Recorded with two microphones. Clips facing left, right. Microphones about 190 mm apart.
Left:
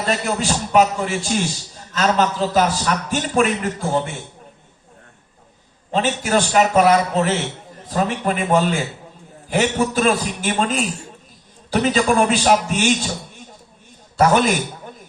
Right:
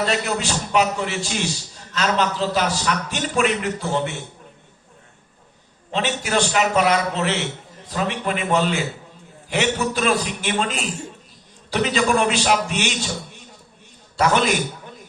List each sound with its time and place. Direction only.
0.1 s a man's voice: 45° left (ahead or behind)
5.9 s a man's voice: 45° left (ahead or behind)
14.2 s a man's voice: 45° left (ahead or behind)